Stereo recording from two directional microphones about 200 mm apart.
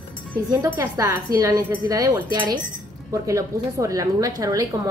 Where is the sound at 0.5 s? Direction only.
15° right (ahead or behind).